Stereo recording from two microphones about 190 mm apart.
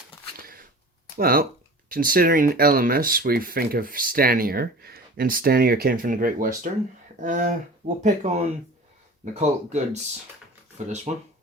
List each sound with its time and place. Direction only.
1.2 s speech: 50° right (ahead or behind)
11.1 s speech: 35° right (ahead or behind)